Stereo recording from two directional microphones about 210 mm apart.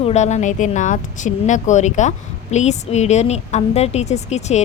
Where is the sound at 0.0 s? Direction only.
30° left (ahead or behind).